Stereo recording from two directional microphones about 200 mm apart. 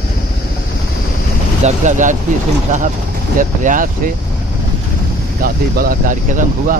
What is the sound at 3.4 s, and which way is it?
Speech, 40° right (ahead or behind).